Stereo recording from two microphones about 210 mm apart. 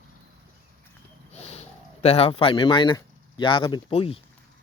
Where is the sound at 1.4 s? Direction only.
30° left (ahead or behind).